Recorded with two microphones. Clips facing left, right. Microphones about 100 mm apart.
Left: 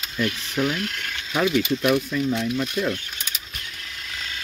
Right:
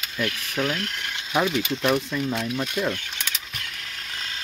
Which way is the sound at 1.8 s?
25° right (ahead or behind).